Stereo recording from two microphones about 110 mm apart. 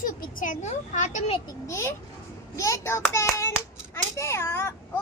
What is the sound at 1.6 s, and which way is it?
A child's voice, 25° left (ahead or behind).